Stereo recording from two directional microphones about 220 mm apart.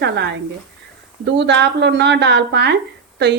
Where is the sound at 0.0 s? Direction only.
50° right (ahead or behind).